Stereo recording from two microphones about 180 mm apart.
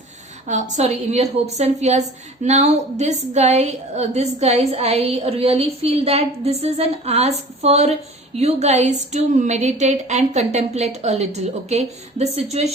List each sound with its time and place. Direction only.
0.4 s a woman's voice: 40° right (ahead or behind)